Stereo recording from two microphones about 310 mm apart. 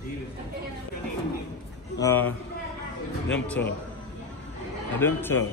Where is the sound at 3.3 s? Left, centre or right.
Centre.